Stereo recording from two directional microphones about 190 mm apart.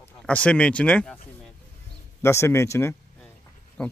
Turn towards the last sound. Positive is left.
turn(degrees=5)  # may be behind; listen again after turning